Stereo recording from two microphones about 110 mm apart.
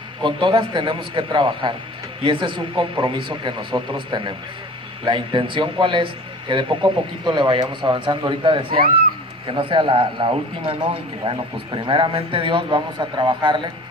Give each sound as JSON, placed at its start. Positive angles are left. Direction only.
{"t": 0.2, "sound": "a man's voice", "side_deg": -45}